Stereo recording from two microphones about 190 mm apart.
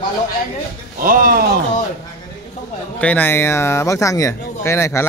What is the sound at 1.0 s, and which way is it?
Speech, 45° right (ahead or behind).